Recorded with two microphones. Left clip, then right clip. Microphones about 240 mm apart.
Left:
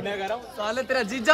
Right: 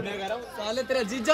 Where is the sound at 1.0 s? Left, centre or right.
Centre.